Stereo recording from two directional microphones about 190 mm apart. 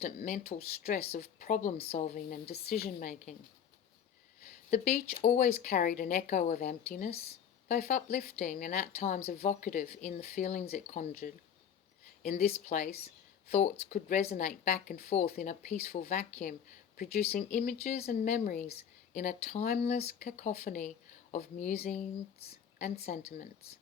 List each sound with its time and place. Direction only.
0.2 s speech: 40° left (ahead or behind)
4.7 s speech: 35° left (ahead or behind)